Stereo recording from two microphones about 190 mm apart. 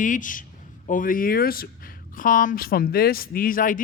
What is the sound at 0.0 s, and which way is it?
A man's voice, 45° left (ahead or behind).